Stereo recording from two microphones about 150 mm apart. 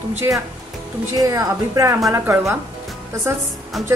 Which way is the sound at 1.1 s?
25° right (ahead or behind).